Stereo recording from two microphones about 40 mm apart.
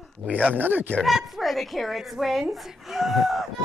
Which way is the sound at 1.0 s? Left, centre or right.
Centre.